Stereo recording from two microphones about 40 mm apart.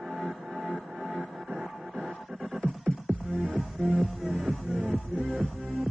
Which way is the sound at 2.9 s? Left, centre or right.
Centre.